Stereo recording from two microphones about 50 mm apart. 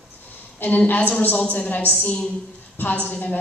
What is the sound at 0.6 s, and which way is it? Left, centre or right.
A woman's voice, left.